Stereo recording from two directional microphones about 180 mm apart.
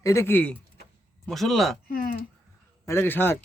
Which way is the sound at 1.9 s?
55° left (ahead or behind).